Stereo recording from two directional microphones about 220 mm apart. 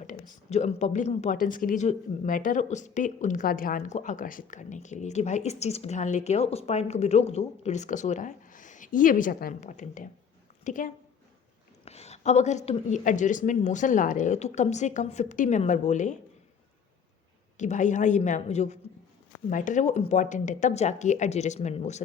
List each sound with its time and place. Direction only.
0.0 s a woman's voice: 35° left (ahead or behind)
17.6 s a woman's voice: 35° left (ahead or behind)